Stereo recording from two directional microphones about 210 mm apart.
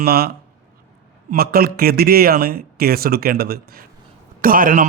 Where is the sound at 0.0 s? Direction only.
45° right (ahead or behind).